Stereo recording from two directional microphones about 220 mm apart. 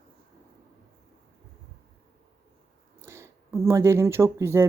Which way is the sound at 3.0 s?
10° right (ahead or behind).